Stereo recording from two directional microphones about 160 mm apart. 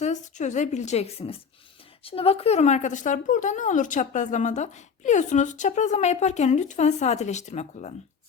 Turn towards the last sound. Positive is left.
turn(degrees=45)  # may be behind; listen again after turning